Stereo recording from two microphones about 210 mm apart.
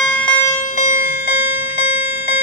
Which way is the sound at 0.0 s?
5° left (ahead or behind).